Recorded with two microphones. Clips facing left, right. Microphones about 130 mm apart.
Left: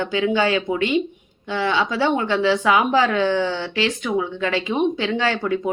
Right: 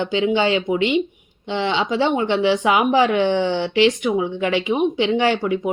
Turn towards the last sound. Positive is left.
turn(degrees=-15)  # may be behind; listen again after turning